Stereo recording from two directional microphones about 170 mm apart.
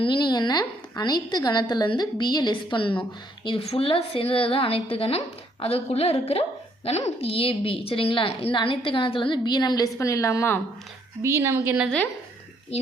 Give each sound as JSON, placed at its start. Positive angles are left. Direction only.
{"t": 0.0, "sound": "a woman's voice", "side_deg": 30}
{"t": 11.2, "sound": "speech", "side_deg": -15}